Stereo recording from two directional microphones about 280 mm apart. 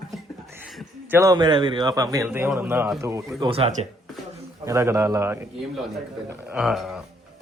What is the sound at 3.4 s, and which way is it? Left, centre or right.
Speech, right.